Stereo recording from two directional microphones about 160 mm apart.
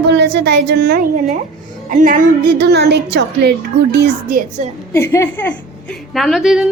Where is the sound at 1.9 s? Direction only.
60° right (ahead or behind); by 3.5 s 90° right.